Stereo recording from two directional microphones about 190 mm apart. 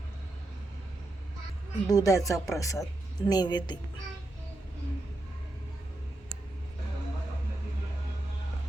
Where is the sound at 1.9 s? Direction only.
20° left (ahead or behind).